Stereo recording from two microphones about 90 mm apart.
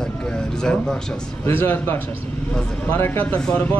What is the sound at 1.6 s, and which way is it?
Speech, 25° left (ahead or behind).